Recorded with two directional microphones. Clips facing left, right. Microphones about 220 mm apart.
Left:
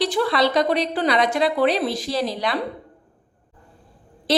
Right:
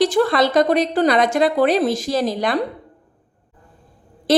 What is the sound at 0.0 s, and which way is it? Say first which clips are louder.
A woman's voice: right 4 dB; 45° right (ahead or behind).